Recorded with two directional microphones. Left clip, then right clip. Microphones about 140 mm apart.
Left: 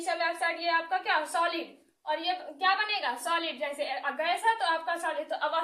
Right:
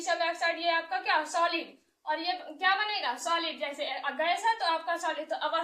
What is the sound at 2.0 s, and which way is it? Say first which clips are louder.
A woman's voice: left 1 dB; 30° left (ahead or behind).